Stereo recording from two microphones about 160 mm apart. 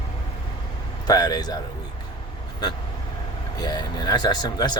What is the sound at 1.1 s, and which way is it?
Speech, 25° left (ahead or behind).